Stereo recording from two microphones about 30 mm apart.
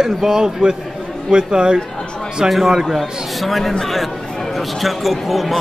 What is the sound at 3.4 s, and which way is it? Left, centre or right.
Speech, centre.